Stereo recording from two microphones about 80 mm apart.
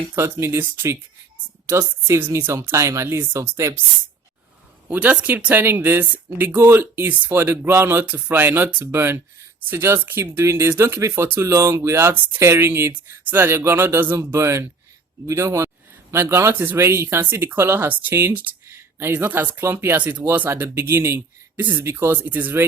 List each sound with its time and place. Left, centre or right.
0.3 s speech: right
2.0 s speech: right
4.9 s speech: centre